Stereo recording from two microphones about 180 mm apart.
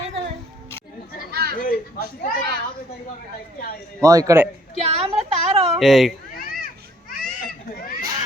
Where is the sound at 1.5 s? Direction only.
55° left (ahead or behind).